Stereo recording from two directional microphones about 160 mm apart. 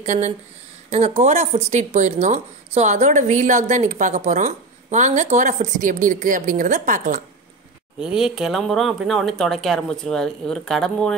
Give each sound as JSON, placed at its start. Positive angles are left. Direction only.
{"t": 0.0, "sound": "a woman's voice", "side_deg": -45}
{"t": 8.0, "sound": "speech", "side_deg": -5}